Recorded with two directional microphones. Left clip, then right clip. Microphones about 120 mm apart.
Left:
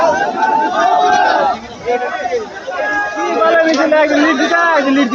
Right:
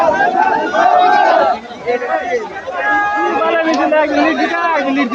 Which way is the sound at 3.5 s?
35° left (ahead or behind).